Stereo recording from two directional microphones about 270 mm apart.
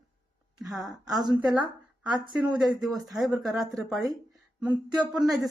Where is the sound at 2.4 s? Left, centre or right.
Centre.